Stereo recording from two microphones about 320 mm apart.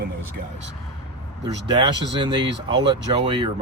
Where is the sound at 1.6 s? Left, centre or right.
Centre.